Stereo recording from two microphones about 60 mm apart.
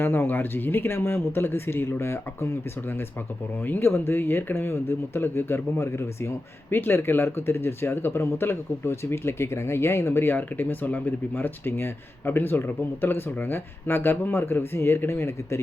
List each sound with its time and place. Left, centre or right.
0.0 s speech: left
3.7 s speech: left